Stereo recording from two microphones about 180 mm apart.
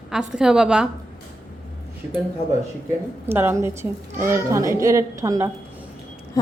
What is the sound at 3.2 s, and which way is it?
A woman's voice, 10° right (ahead or behind).